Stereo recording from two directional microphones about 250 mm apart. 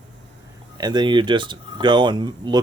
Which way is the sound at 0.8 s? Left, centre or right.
Centre.